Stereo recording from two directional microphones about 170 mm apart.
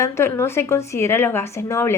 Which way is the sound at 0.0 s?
15° left (ahead or behind).